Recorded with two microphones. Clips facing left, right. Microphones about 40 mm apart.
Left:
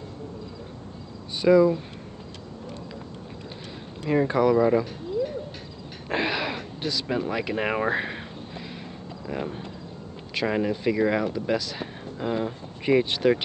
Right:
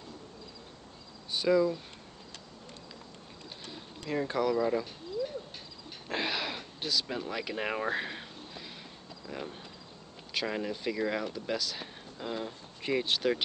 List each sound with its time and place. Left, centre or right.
1.4 s speech: centre
4.0 s speech: left
6.1 s a sound: centre
9.3 s speech: left